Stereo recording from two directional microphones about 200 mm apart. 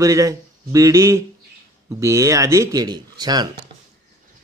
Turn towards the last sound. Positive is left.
turn(degrees=-20)  # may be behind; listen again after turning